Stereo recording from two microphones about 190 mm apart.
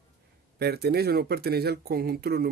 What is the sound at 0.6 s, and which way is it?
Speech, 55° right (ahead or behind).